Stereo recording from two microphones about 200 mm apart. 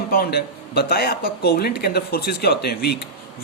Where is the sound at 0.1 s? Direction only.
50° left (ahead or behind).